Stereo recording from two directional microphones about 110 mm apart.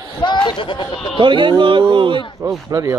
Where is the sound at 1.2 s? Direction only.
45° right (ahead or behind).